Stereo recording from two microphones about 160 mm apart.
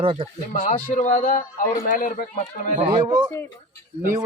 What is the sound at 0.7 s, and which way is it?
A man's voice, 50° left (ahead or behind).